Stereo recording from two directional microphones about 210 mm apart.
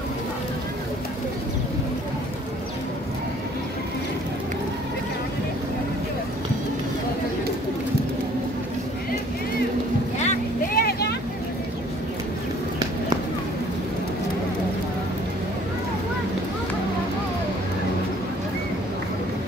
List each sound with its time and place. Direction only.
10.1 s boat: 35° left (ahead or behind)
10.8 s vehicle: 50° left (ahead or behind)